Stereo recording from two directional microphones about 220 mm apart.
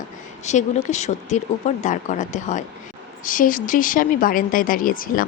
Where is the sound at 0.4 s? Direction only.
30° left (ahead or behind).